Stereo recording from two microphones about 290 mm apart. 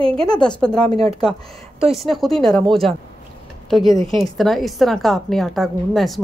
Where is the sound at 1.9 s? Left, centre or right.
Centre.